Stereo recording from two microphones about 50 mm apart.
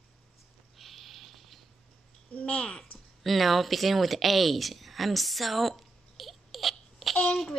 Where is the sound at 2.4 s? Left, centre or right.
Left.